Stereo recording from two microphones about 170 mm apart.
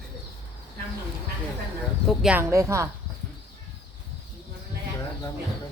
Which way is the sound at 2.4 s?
15° right (ahead or behind).